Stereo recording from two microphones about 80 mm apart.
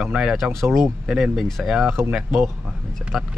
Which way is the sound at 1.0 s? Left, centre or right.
Centre.